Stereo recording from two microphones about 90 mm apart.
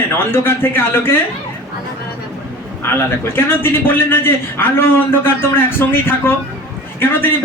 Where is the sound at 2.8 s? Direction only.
25° left (ahead or behind).